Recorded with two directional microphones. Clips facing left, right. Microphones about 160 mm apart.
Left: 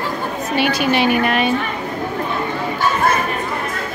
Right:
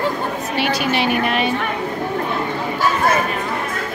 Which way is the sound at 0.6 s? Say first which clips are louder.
Left 3 dB; 50° left (ahead or behind).